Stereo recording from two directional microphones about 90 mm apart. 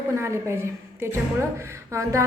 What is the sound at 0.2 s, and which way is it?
Speech, 30° right (ahead or behind).